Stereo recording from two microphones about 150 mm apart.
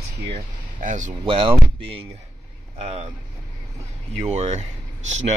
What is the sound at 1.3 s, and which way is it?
Speech, 35° right (ahead or behind).